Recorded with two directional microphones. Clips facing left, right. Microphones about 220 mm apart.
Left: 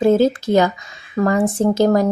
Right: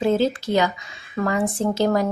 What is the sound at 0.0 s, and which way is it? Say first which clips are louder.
Speech: left 6 dB; 45° left (ahead or behind).